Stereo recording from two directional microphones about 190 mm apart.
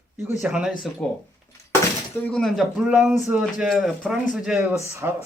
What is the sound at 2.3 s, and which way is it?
Speech, centre (ahead or behind).